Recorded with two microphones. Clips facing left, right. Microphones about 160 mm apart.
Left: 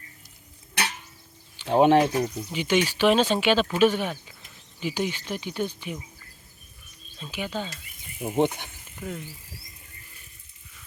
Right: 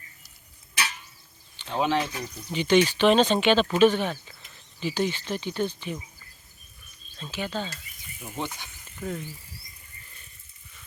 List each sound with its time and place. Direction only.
1.7 s speech: 55° left (ahead or behind)
2.5 s speech: 10° left (ahead or behind)
7.2 s speech: 10° left (ahead or behind)
8.4 s speech: 60° left (ahead or behind)
9.0 s speech: 5° left (ahead or behind)